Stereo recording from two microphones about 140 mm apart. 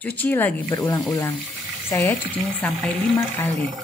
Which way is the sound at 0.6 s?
35° left (ahead or behind).